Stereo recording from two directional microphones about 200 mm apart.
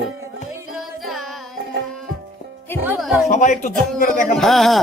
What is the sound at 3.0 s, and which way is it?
Music, centre (ahead or behind).